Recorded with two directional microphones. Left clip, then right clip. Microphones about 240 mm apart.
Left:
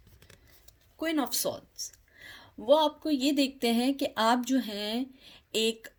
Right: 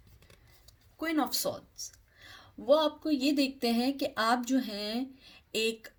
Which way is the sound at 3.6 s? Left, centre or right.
Left.